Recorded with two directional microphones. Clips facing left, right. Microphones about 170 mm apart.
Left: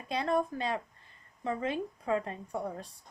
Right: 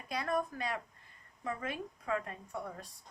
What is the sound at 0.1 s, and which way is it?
A woman's voice, 30° left (ahead or behind).